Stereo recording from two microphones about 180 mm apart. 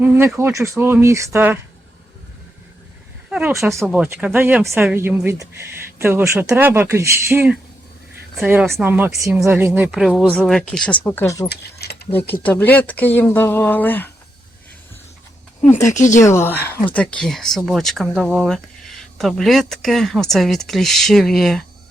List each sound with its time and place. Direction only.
0.0 s speech: 10° right (ahead or behind)
3.2 s a sound: 5° right (ahead or behind)
3.8 s speech: 5° right (ahead or behind)
8.7 s speech: 10° right (ahead or behind); by 11.4 s 15° left (ahead or behind)
11.4 s speech: 65° left (ahead or behind)
12.5 s speech: 10° left (ahead or behind)
16.0 s speech: 45° left (ahead or behind)
16.2 s speech: 15° left (ahead or behind)